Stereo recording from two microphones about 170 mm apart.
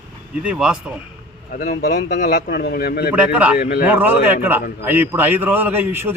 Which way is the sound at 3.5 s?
55° left (ahead or behind).